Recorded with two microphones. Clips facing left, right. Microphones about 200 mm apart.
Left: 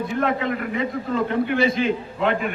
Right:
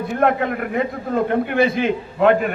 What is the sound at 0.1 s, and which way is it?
A man's voice, 55° right (ahead or behind).